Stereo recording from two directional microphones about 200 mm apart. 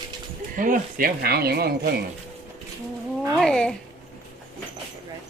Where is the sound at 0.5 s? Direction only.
40° right (ahead or behind).